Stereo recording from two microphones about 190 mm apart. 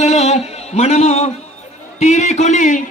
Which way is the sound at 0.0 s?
35° left (ahead or behind).